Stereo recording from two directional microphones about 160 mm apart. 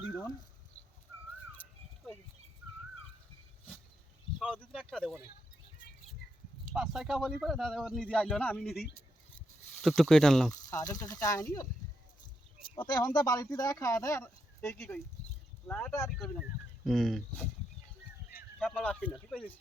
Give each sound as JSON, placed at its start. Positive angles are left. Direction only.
{"t": 0.2, "sound": "speech", "side_deg": 20}
{"t": 4.4, "sound": "speech", "side_deg": 0}
{"t": 6.7, "sound": "speech", "side_deg": 0}
{"t": 9.8, "sound": "speech", "side_deg": 0}
{"t": 10.5, "sound": "speech", "side_deg": 20}
{"t": 12.7, "sound": "speech", "side_deg": 25}
{"t": 18.6, "sound": "speech", "side_deg": 5}